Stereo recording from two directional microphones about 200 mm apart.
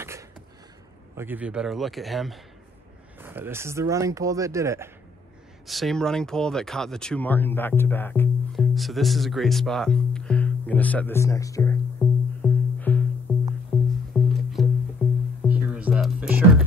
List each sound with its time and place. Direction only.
1.1 s speech: 10° right (ahead or behind)
3.2 s speech: 10° right (ahead or behind)
5.7 s speech: centre (ahead or behind)
12.0 s music: 5° left (ahead or behind)
13.7 s music: 10° right (ahead or behind)